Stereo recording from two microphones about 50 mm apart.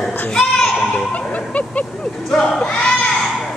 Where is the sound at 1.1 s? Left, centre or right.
Left.